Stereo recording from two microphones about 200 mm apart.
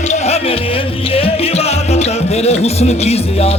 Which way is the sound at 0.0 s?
35° left (ahead or behind).